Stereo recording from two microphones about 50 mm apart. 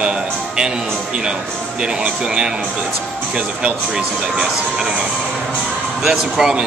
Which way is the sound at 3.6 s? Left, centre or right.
Right.